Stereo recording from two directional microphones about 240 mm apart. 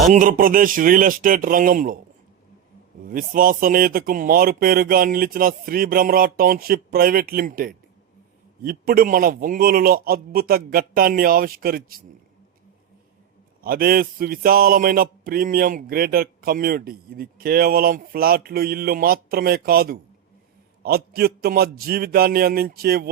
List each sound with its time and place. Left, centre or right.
0.1 s a man's voice: right
3.1 s a man's voice: right
13.6 s a man's voice: right